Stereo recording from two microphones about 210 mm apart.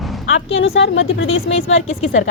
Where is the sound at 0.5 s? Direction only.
65° left (ahead or behind).